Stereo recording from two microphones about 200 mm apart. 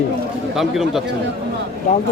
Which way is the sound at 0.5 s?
Centre (ahead or behind).